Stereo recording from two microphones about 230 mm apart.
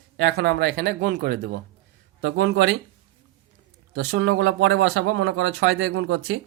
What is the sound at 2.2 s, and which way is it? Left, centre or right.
Speech, right.